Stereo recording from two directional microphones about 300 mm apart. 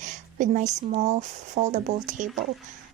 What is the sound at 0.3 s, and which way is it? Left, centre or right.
Speech, right.